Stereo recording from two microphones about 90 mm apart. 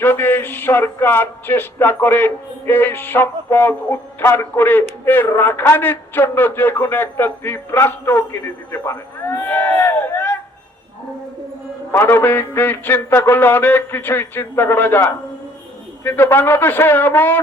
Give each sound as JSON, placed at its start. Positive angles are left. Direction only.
{"t": 0.0, "sound": "speech", "side_deg": 20}
{"t": 9.5, "sound": "crowd", "side_deg": 20}
{"t": 11.9, "sound": "speech", "side_deg": 25}